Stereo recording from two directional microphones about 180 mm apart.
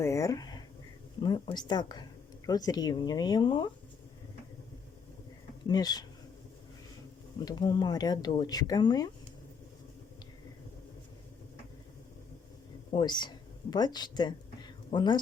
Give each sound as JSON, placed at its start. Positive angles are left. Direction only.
{"t": 0.0, "sound": "speech", "side_deg": 15}
{"t": 5.6, "sound": "speech", "side_deg": 20}
{"t": 7.3, "sound": "speech", "side_deg": 25}
{"t": 12.9, "sound": "speech", "side_deg": 25}